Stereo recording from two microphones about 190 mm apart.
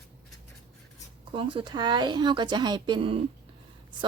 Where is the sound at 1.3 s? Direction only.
25° right (ahead or behind).